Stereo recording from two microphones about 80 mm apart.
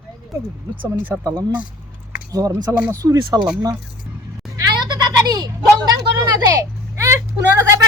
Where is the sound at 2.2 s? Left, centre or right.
Right.